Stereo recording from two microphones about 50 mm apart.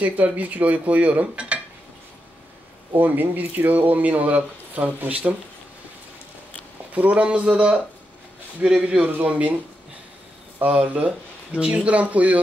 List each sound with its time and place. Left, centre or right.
0.0 s speech: right
3.0 s speech: right
6.9 s speech: right
10.6 s speech: right